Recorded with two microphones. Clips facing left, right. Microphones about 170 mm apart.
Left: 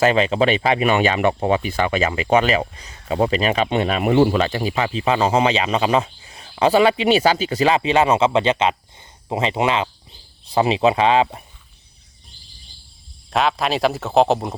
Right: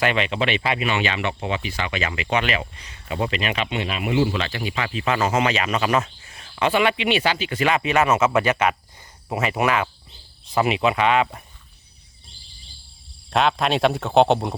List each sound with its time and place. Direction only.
0.0 s speech: 35° left (ahead or behind)
6.2 s a sound: 20° left (ahead or behind)
6.6 s speech: 35° left (ahead or behind)
13.3 s speech: centre (ahead or behind)